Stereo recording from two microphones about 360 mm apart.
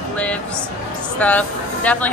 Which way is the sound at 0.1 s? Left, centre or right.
Centre.